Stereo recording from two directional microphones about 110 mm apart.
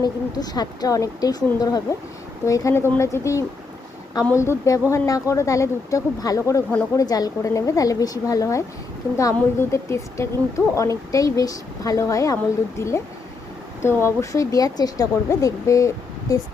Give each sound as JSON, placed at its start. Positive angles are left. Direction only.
{"t": 0.0, "sound": "speech", "side_deg": 35}